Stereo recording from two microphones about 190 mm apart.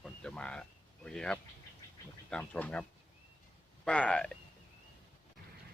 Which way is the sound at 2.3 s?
5° left (ahead or behind).